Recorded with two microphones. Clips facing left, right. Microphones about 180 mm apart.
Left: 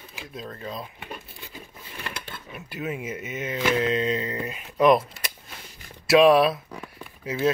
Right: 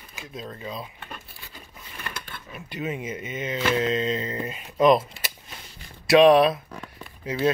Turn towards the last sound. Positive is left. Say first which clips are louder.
# even
turn(degrees=0)  # may be behind; listen again after turning